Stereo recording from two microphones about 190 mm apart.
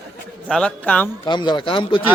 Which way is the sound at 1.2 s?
25° left (ahead or behind).